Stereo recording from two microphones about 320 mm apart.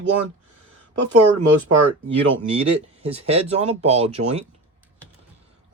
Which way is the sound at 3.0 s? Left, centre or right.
Centre.